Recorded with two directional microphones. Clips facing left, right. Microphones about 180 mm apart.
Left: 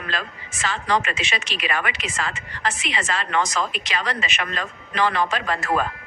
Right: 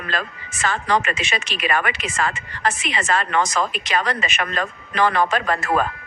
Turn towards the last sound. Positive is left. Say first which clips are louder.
# right 3 dB
turn(degrees=-50)  # may be behind; listen again after turning